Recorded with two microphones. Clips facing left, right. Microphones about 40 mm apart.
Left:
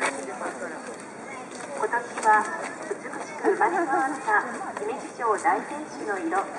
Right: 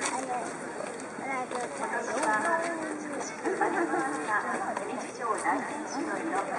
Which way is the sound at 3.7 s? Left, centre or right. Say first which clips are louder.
Left 4 dB; centre.